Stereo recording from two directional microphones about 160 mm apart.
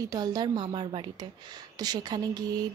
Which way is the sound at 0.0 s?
25° right (ahead or behind).